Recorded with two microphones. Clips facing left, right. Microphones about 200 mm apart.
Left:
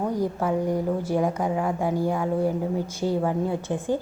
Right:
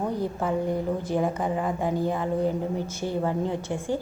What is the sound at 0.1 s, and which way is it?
A woman's voice, 10° left (ahead or behind).